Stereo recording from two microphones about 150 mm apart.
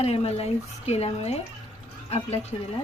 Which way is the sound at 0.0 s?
45° left (ahead or behind).